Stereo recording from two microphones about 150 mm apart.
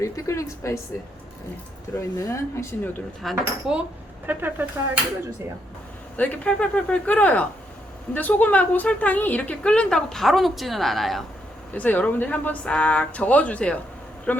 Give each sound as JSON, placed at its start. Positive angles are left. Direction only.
{"t": 0.0, "sound": "speech", "side_deg": 20}
{"t": 2.0, "sound": "a woman's voice", "side_deg": 20}
{"t": 3.2, "sound": "speech", "side_deg": 0}
{"t": 6.1, "sound": "a woman's voice", "side_deg": 10}
{"t": 11.7, "sound": "a woman's voice", "side_deg": 10}